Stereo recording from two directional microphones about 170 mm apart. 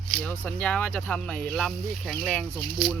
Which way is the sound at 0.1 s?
5° left (ahead or behind).